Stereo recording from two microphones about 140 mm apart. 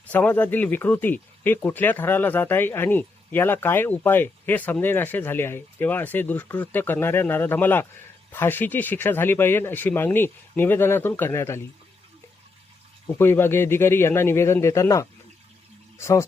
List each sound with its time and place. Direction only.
0.1 s speech: 10° left (ahead or behind)
13.1 s speech: 15° left (ahead or behind)